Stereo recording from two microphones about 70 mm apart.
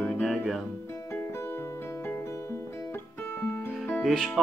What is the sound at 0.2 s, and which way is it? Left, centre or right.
Music, centre.